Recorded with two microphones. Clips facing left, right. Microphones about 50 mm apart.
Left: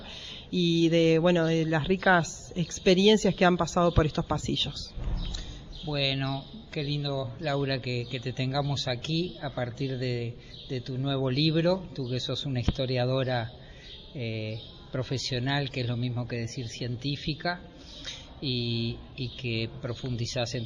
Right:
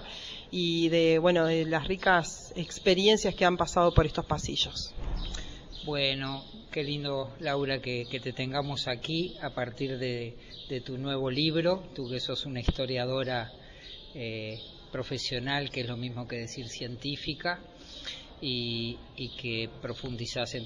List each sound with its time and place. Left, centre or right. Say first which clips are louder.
0.5 s speech: left 3 dB; centre
5.9 s speech: left 2 dB; centre
9.2 s speech: left 1 dB; right
9.7 s speech: left 1 dB; centre